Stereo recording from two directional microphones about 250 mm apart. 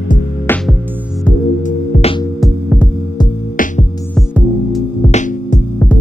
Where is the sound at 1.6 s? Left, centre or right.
Left.